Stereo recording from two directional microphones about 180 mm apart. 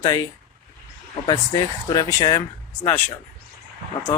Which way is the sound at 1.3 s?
25° left (ahead or behind).